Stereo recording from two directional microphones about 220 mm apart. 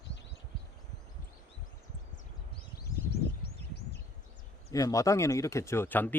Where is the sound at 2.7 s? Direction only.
45° left (ahead or behind).